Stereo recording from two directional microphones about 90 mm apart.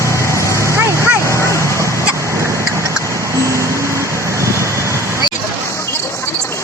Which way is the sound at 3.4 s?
35° right (ahead or behind).